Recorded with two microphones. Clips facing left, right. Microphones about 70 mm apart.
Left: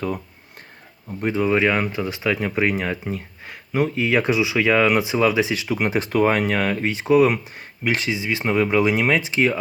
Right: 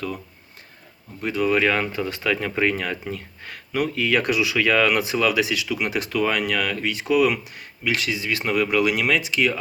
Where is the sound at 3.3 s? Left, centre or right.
Centre.